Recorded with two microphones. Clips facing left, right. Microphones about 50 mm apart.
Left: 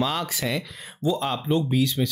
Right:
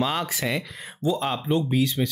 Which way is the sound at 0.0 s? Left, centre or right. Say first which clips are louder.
Even; centre.